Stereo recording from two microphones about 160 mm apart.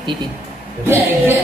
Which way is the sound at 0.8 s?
15° right (ahead or behind).